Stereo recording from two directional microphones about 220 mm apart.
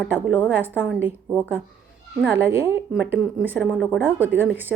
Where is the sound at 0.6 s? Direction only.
10° right (ahead or behind).